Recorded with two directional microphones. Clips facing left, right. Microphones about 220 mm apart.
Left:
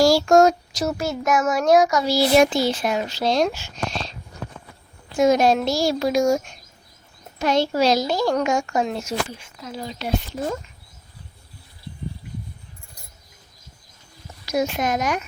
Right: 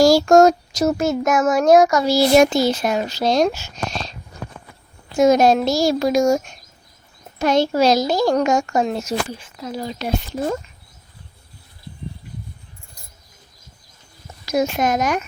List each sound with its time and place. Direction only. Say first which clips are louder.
0.0 s child singing: right 3 dB; 45° right (ahead or behind)
5.1 s child singing: right 3 dB; 40° right (ahead or behind)
7.3 s speech: right 3 dB; 45° right (ahead or behind)
14.4 s child singing: right 3 dB; 45° right (ahead or behind)